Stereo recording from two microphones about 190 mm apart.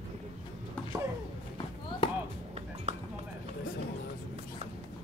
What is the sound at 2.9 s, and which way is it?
Clip-clop, 40° right (ahead or behind).